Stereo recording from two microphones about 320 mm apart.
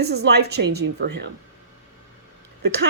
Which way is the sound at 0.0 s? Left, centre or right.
Right.